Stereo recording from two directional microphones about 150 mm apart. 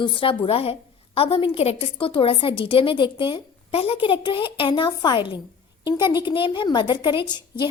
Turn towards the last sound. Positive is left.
turn(degrees=30)  # may be behind; listen again after turning